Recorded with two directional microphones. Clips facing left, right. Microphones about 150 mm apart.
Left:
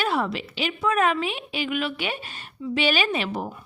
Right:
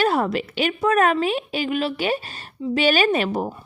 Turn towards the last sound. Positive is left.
turn(degrees=-45)  # may be behind; listen again after turning